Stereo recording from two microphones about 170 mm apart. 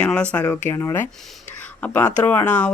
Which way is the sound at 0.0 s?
5° left (ahead or behind).